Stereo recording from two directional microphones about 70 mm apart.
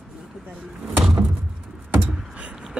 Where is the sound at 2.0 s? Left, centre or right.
Centre.